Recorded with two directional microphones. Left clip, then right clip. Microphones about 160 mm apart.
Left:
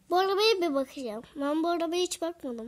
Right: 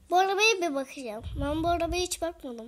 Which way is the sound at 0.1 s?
40° left (ahead or behind).